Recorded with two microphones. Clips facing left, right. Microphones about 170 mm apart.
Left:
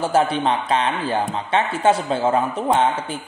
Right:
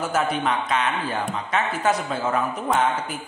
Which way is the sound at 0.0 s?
30° left (ahead or behind).